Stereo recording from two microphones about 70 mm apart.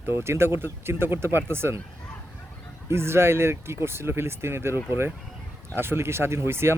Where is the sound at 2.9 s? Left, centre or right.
Right.